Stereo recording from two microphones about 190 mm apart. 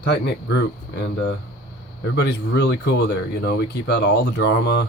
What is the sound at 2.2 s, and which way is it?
Speech, 65° left (ahead or behind).